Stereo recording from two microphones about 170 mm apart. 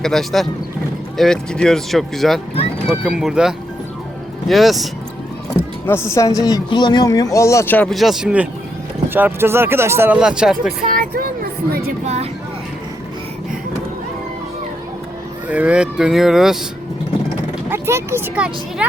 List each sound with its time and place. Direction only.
0.0 s speech: centre (ahead or behind)
5.8 s speech: 15° left (ahead or behind); by 10.7 s 5° right (ahead or behind)
10.8 s speech: 55° right (ahead or behind)
12.0 s vehicle: 40° right (ahead or behind)
15.4 s speech: 10° right (ahead or behind)
17.7 s speech: 15° right (ahead or behind)